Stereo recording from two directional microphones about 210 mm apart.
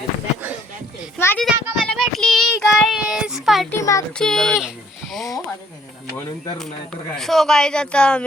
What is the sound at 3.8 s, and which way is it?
Speech, 15° left (ahead or behind).